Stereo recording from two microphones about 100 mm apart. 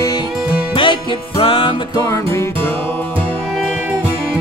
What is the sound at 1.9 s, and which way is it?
Music, 30° left (ahead or behind).